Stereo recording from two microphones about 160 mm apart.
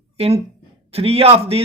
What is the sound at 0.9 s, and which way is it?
Speech, 40° right (ahead or behind).